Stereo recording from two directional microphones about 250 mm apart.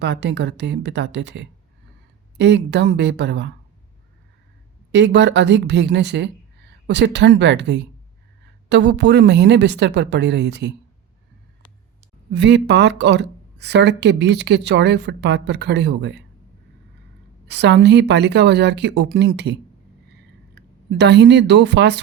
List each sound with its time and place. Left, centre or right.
0.0 s speech: right
4.9 s speech: right
12.3 s speech: right
17.5 s speech: right
20.6 s a woman's voice: right